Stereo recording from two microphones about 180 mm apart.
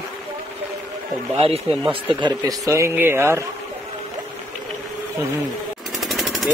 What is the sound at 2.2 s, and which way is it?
Speech, 20° right (ahead or behind).